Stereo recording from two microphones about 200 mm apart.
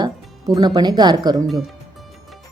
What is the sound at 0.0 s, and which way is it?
Speech, 20° right (ahead or behind).